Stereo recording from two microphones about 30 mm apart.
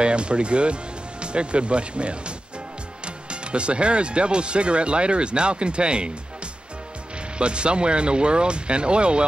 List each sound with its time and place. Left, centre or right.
0.0 s speech: right
7.3 s speech: right